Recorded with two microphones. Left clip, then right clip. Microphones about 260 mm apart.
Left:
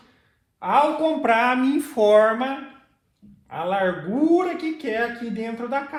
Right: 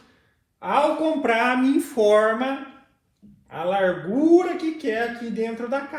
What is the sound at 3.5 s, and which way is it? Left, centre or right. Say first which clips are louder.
Speech: right 1 dB; left.